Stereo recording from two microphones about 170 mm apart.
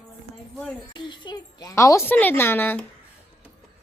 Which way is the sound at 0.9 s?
25° left (ahead or behind).